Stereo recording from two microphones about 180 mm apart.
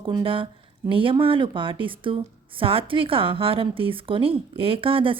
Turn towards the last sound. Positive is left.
turn(degrees=-30)  # may be behind; listen again after turning